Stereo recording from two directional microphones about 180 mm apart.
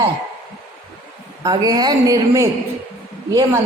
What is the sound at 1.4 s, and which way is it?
A woman's voice, 20° right (ahead or behind).